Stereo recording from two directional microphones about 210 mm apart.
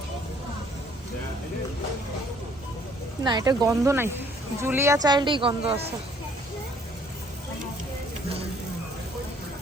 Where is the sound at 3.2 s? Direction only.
20° right (ahead or behind).